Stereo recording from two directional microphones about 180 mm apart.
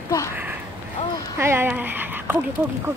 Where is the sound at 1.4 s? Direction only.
15° right (ahead or behind).